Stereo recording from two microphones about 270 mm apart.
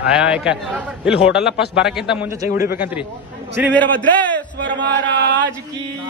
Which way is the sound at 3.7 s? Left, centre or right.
Centre.